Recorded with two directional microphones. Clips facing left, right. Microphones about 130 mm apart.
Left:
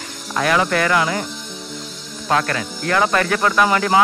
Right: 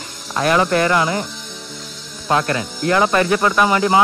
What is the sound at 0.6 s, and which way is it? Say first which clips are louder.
Speech: right 2 dB; 30° right (ahead or behind).